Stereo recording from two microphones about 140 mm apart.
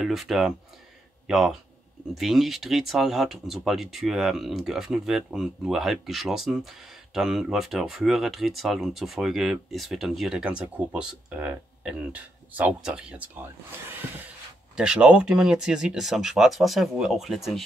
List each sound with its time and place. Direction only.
0.0 s speech: centre (ahead or behind)